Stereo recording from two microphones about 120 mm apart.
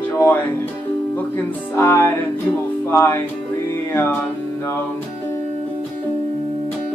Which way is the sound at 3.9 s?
20° left (ahead or behind).